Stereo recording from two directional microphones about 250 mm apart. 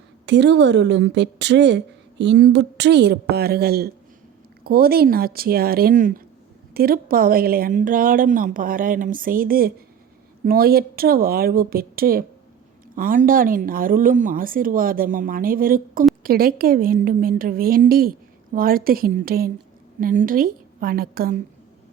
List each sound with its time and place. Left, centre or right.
0.3 s a woman's voice: right